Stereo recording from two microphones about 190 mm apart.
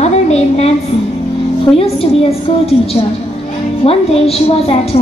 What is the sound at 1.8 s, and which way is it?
A woman's voice, 30° left (ahead or behind).